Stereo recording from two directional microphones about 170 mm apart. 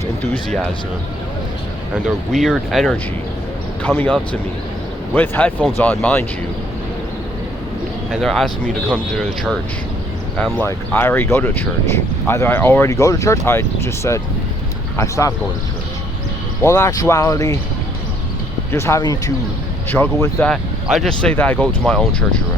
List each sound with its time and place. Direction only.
2.0 s speech: centre (ahead or behind)
8.1 s speech: centre (ahead or behind); by 15.3 s 15° left (ahead or behind)
16.6 s speech: 15° left (ahead or behind)
18.7 s speech: 15° left (ahead or behind)
20.5 s speech: centre (ahead or behind)